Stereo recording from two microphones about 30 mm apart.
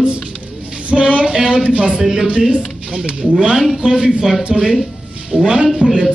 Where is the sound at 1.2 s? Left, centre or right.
Right.